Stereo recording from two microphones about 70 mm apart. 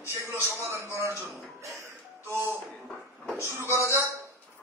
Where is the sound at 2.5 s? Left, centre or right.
Centre.